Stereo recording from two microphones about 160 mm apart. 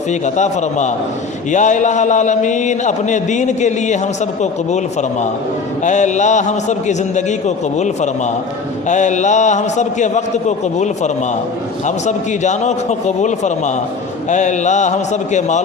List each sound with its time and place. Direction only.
0.1 s a man's voice: 50° left (ahead or behind)
5.8 s a man's voice: 50° left (ahead or behind)